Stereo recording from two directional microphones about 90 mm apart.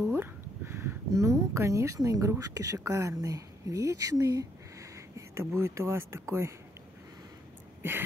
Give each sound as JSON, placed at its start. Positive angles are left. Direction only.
{"t": 0.0, "sound": "speech", "side_deg": -25}